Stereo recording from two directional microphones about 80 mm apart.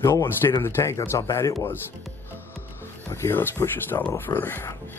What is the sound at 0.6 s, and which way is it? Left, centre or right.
Speech, left.